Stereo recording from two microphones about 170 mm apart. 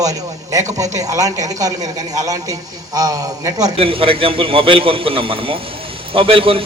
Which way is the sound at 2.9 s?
20° right (ahead or behind).